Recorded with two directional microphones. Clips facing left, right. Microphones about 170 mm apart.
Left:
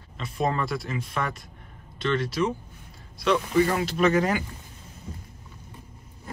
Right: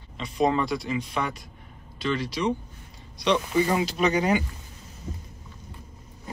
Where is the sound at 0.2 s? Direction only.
Centre (ahead or behind).